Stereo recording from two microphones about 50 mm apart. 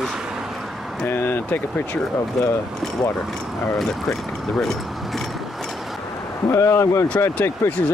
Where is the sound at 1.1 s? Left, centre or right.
Left.